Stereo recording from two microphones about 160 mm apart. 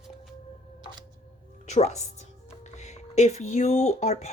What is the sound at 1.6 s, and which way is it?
Speech, 45° left (ahead or behind).